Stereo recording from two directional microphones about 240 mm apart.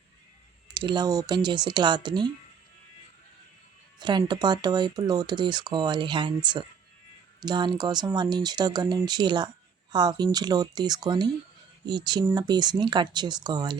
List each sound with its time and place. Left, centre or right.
0.7 s speech: centre
4.0 s speech: centre